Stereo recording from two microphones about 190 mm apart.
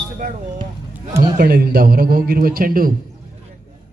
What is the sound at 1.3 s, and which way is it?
A man's voice, 50° right (ahead or behind).